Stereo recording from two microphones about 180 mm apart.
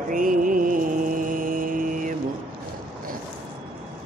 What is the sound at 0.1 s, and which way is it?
Music, 50° right (ahead or behind).